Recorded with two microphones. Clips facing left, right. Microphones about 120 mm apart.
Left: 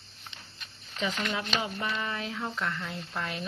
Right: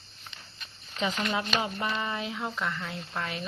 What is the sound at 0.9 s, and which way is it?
Speech, 20° right (ahead or behind).